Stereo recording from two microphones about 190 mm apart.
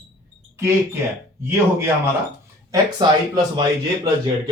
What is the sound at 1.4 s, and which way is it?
A man's voice, 15° right (ahead or behind).